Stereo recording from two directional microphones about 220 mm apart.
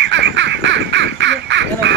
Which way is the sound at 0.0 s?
55° right (ahead or behind).